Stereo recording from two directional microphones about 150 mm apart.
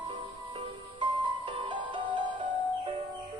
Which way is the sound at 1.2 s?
35° right (ahead or behind).